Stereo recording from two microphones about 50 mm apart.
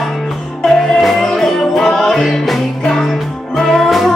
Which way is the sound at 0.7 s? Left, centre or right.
Centre.